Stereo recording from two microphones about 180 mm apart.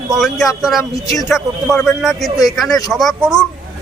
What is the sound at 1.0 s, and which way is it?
Speech, 20° left (ahead or behind).